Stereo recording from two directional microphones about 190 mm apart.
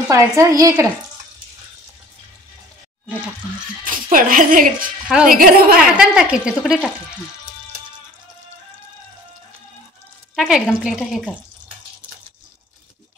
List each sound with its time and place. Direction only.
0.1 s speech: 15° right (ahead or behind)
3.8 s speech: 45° right (ahead or behind)
5.0 s speech: 5° right (ahead or behind)
5.3 s a woman's voice: 50° right (ahead or behind)
5.9 s speech: 5° right (ahead or behind)
10.3 s speech: centre (ahead or behind)